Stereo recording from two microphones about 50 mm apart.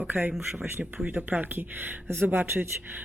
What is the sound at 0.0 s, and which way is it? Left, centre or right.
Speech, right.